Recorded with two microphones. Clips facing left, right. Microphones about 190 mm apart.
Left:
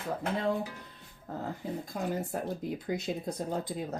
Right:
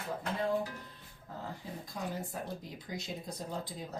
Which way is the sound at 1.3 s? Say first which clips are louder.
Left 7 dB; 55° left (ahead or behind).